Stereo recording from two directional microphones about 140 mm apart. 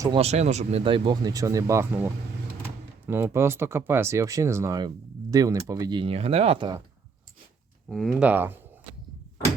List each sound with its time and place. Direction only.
0.2 s speech: 50° right (ahead or behind); by 2.0 s 15° right (ahead or behind)
3.1 s speech: 15° right (ahead or behind)
5.9 s speech: 40° right (ahead or behind)
7.9 s speech: centre (ahead or behind)
8.1 s speech: 10° right (ahead or behind)